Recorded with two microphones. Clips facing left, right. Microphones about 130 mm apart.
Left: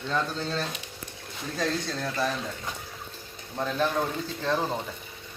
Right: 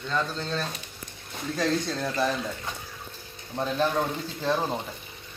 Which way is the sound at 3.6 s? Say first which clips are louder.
Right 1 dB; 15° right (ahead or behind).